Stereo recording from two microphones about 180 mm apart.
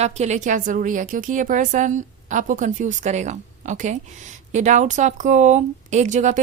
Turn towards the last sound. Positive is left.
turn(degrees=-40)  # may be behind; listen again after turning